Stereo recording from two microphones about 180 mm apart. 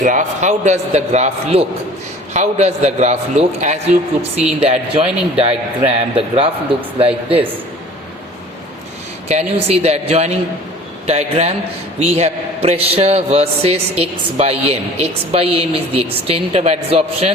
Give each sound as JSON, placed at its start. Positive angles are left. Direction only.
{"t": 0.0, "sound": "a man's voice", "side_deg": -45}
{"t": 9.6, "sound": "a man's voice", "side_deg": -35}